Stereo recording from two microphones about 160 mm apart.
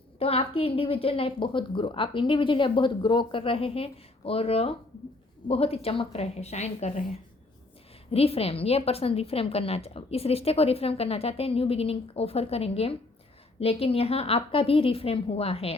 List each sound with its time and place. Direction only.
0.2 s a woman's voice: 35° left (ahead or behind)
8.1 s a woman's voice: 40° left (ahead or behind)